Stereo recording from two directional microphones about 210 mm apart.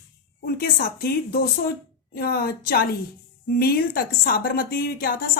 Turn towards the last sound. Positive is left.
turn(degrees=45)  # may be behind; listen again after turning